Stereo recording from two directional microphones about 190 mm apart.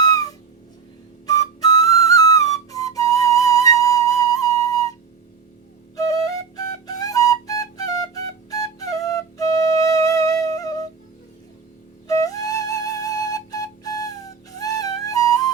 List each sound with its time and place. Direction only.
0.0 s a sound: 20° left (ahead or behind)
1.3 s whistle: 20° left (ahead or behind)
6.6 s flute: 20° left (ahead or behind)
12.0 s flute: 20° left (ahead or behind)